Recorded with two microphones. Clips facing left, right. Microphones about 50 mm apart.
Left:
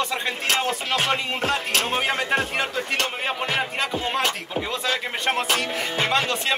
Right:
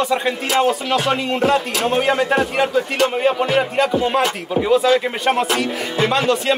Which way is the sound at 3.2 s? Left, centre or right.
Centre.